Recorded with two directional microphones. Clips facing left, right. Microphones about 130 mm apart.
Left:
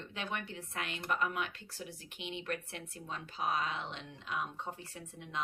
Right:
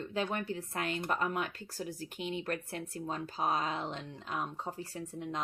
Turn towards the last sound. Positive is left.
turn(degrees=-40)  # may be behind; listen again after turning